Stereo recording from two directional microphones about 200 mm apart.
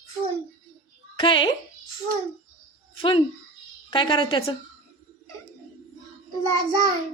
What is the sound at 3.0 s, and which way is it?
A woman's voice, 25° left (ahead or behind).